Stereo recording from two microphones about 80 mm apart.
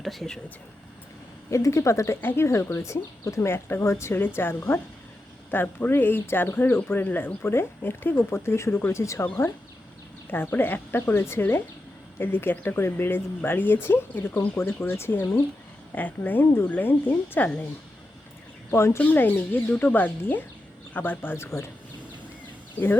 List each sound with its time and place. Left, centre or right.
0.0 s speech: centre
1.5 s speech: left
10.3 s speech: left
16.0 s speech: left
18.7 s speech: left
18.9 s speech: left